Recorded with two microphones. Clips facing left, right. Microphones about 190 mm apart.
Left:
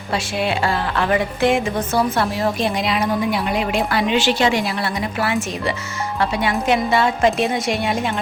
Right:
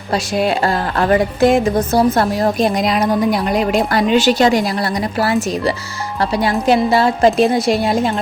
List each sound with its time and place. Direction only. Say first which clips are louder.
0.3 s a woman's voice: right 4 dB; 40° right (ahead or behind)